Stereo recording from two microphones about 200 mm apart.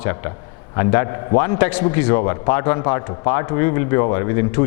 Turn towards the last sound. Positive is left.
turn(degrees=15)  # may be behind; listen again after turning